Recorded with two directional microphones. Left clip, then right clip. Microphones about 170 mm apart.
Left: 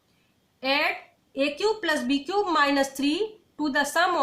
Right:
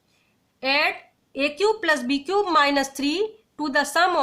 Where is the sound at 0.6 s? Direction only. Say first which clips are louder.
Right 3 dB; 35° right (ahead or behind).